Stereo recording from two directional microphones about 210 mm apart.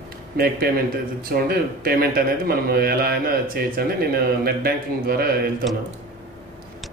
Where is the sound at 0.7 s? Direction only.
45° right (ahead or behind).